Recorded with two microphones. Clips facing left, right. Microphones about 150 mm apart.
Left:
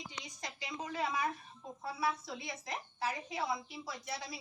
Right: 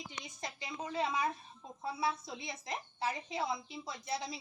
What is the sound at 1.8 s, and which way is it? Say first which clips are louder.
A woman's voice: right 1 dB; 20° right (ahead or behind).